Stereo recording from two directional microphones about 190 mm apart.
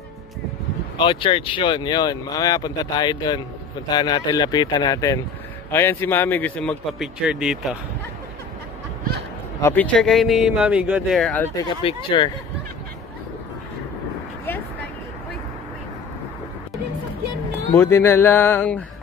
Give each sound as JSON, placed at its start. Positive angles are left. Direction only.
{"t": 0.9, "sound": "speech", "side_deg": 25}
{"t": 9.6, "sound": "speech", "side_deg": 10}
{"t": 11.8, "sound": "speech", "side_deg": 25}
{"t": 17.7, "sound": "speech", "side_deg": 10}